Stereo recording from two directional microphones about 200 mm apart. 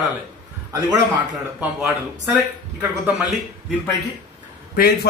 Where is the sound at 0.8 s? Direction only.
5° right (ahead or behind).